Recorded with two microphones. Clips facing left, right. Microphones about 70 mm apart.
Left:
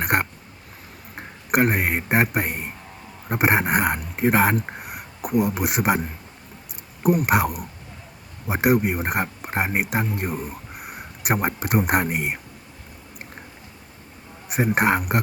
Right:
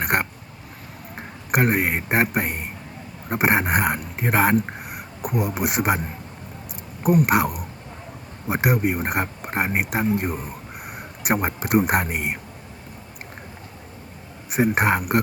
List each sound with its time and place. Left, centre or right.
0.0 s a sound: centre
1.1 s a man's voice: centre
14.5 s speech: centre